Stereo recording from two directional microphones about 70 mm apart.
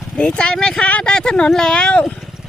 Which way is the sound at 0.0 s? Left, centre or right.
Centre.